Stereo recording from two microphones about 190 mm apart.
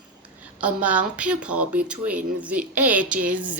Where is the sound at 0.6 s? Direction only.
10° right (ahead or behind).